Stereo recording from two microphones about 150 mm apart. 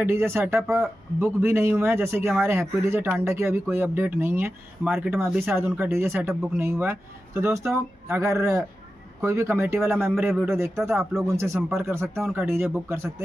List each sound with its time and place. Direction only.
0.0 s speech: 15° right (ahead or behind)